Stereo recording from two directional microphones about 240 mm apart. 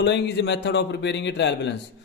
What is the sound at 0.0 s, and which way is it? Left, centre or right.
Speech, left.